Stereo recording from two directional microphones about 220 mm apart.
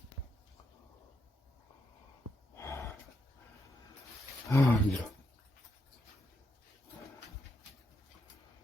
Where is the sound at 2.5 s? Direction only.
10° left (ahead or behind).